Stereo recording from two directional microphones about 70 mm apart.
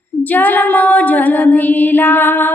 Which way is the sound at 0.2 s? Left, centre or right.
Left.